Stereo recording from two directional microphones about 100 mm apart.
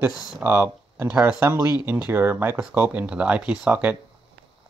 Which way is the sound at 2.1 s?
20° right (ahead or behind).